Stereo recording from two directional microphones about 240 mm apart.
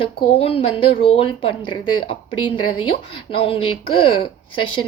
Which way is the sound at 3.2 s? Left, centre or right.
Left.